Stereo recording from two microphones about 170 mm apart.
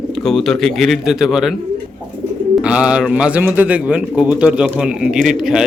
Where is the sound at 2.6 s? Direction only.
5° right (ahead or behind).